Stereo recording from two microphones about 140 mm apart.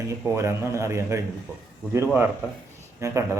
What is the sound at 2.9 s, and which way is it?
Speech, 20° right (ahead or behind).